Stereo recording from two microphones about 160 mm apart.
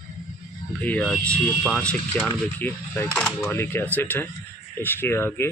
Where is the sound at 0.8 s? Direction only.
5° left (ahead or behind).